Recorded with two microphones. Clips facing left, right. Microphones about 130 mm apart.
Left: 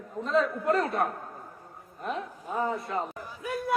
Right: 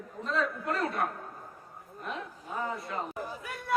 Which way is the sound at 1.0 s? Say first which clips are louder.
Left 4 dB; 40° left (ahead or behind).